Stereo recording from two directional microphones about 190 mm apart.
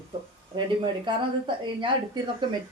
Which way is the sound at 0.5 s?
25° right (ahead or behind).